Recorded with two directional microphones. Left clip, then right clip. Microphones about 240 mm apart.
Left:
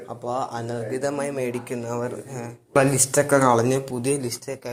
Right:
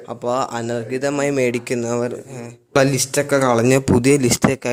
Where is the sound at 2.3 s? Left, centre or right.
Right.